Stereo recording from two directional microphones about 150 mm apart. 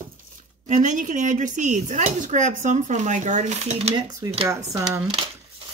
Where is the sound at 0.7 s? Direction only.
55° right (ahead or behind).